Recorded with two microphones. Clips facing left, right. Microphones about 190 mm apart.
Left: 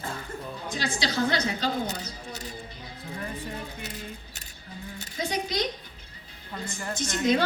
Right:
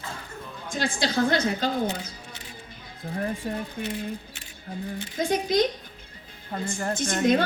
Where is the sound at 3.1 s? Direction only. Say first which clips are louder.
Right 7 dB; 55° right (ahead or behind).